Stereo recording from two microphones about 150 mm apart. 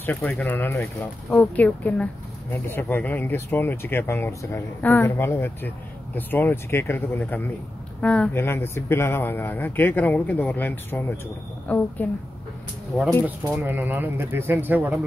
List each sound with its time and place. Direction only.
0.0 s speech: 10° left (ahead or behind)
13.5 s speech: 10° right (ahead or behind)